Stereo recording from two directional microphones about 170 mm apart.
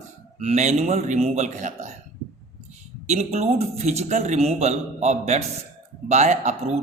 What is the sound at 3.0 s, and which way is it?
A man's voice, 40° right (ahead or behind).